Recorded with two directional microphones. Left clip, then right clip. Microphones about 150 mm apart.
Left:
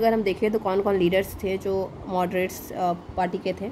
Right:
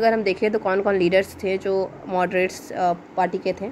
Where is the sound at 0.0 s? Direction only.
5° right (ahead or behind).